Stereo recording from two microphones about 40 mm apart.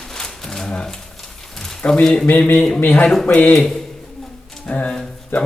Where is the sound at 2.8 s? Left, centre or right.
Left.